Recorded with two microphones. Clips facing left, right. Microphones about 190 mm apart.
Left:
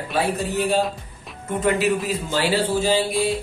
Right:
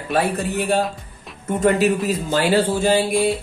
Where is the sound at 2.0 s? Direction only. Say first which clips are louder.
Right 3 dB; 50° right (ahead or behind).